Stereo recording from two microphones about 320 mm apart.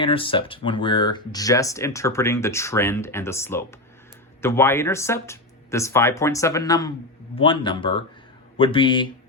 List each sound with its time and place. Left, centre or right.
0.0 s speech: centre